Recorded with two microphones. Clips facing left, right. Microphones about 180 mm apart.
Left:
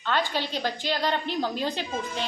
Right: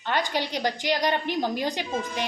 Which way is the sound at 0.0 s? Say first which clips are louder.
Right 1 dB; 15° right (ahead or behind).